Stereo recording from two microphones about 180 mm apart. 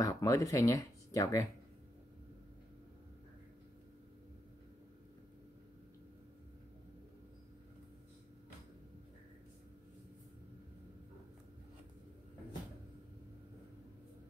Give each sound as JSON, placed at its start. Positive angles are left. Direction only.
{"t": 0.0, "sound": "speech", "side_deg": 20}